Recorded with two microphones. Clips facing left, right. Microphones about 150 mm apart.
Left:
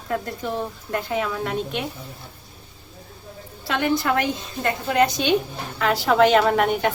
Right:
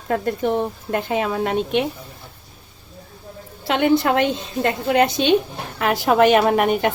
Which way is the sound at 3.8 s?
25° right (ahead or behind).